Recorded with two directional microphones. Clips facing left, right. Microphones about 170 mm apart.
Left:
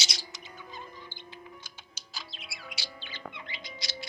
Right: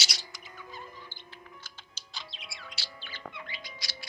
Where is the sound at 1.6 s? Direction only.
5° left (ahead or behind).